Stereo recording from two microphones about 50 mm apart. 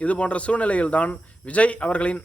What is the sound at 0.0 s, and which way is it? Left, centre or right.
Speech, left.